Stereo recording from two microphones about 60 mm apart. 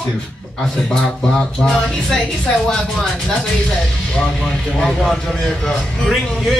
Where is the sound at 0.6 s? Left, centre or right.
Centre.